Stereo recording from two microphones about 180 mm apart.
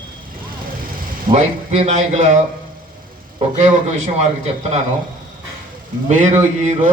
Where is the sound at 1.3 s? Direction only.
35° right (ahead or behind).